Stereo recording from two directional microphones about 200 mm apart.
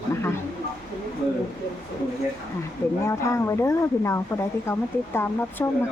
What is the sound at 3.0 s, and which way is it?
A woman's voice, 15° left (ahead or behind).